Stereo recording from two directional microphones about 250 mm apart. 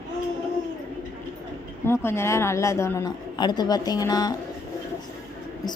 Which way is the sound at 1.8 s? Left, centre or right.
Centre.